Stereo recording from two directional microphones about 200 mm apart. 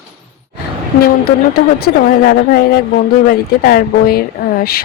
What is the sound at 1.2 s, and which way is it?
A woman's voice, 50° left (ahead or behind).